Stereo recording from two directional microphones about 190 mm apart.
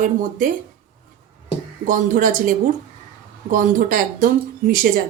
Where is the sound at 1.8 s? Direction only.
45° right (ahead or behind).